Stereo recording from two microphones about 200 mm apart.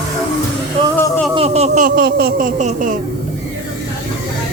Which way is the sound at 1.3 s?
30° right (ahead or behind).